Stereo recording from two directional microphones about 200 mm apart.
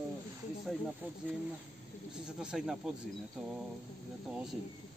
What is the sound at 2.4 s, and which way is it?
Speech, 5° right (ahead or behind).